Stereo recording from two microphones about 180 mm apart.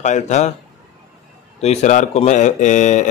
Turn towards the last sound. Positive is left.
turn(degrees=40)  # may be behind; listen again after turning